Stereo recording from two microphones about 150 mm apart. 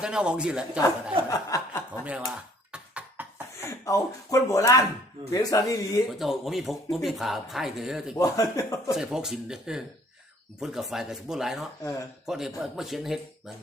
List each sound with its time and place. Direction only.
0.0 s speech: 5° right (ahead or behind)
1.3 s snicker: 20° left (ahead or behind)
1.9 s a sound: 10° right (ahead or behind)
3.6 s speech: 20° left (ahead or behind)
6.1 s speech: centre (ahead or behind)
8.1 s speech: 20° left (ahead or behind)
8.9 s speech: 5° right (ahead or behind)
11.8 s speech: 20° left (ahead or behind)
12.2 s speech: 5° right (ahead or behind)